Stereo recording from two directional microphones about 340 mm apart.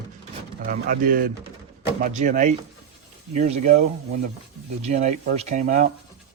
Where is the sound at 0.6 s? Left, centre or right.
Right.